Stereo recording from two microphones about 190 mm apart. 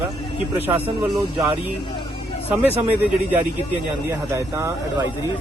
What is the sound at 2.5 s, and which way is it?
Speech, 10° right (ahead or behind).